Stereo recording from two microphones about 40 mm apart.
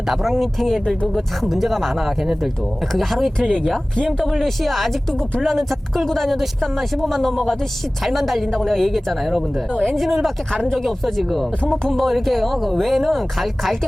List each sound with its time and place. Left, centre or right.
0.1 s speech: centre
3.9 s speech: centre
4.3 s speech: centre
8.5 s a woman's voice: centre
9.9 s speech: centre
10.5 s speech: centre
10.8 s speech: centre